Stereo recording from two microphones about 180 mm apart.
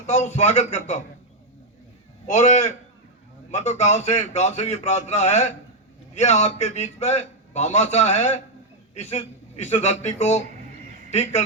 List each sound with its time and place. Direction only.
0.1 s a man's voice: 40° left (ahead or behind)
2.2 s a man's voice: 40° left (ahead or behind)